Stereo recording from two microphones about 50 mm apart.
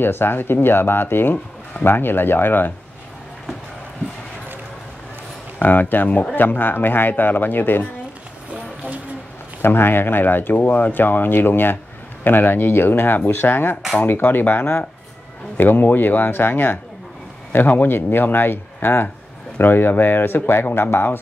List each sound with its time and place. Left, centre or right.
0.0 s speech: left
1.3 s a sound: left
1.9 s speech: left
5.6 s a man's voice: left
9.6 s a man's voice: left